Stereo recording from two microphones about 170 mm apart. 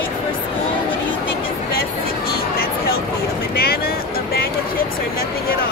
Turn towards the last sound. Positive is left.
turn(degrees=65)  # may be behind; listen again after turning